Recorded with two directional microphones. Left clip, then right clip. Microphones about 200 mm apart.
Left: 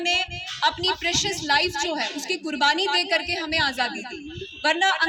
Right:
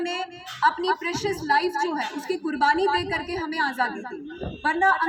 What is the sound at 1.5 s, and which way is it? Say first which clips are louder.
A woman's voice: even; 50° left (ahead or behind).